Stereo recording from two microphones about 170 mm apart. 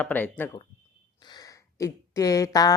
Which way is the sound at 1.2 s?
25° left (ahead or behind).